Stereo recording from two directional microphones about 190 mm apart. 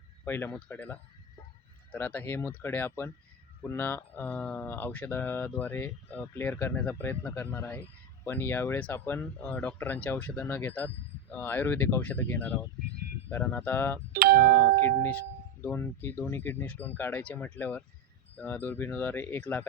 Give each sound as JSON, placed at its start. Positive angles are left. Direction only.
{"t": 0.3, "sound": "speech", "side_deg": 10}
{"t": 14.1, "sound": "doorbell", "side_deg": -50}
{"t": 14.8, "sound": "speech", "side_deg": 10}